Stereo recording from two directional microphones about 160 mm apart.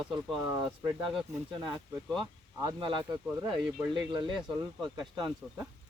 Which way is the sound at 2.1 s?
25° right (ahead or behind).